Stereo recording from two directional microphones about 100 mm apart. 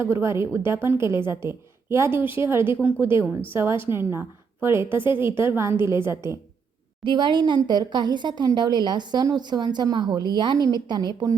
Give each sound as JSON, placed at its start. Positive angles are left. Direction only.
{"t": 0.0, "sound": "a woman's voice", "side_deg": -25}
{"t": 7.0, "sound": "speech", "side_deg": -50}